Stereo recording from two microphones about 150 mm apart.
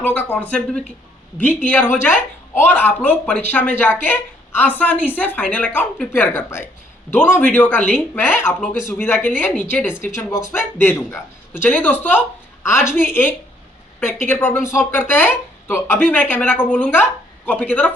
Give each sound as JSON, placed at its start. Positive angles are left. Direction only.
{"t": 0.0, "sound": "speech", "side_deg": 10}